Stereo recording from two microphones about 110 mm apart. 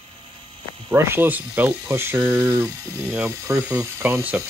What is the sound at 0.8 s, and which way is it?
Speech, 25° right (ahead or behind).